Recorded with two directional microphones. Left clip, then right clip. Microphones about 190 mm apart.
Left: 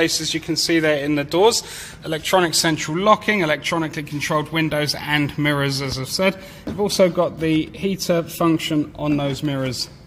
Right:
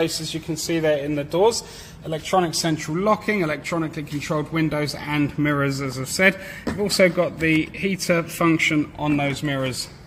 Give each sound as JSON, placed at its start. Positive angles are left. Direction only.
{"t": 0.0, "sound": "a man's voice", "side_deg": 10}
{"t": 5.4, "sound": "a man's voice", "side_deg": 30}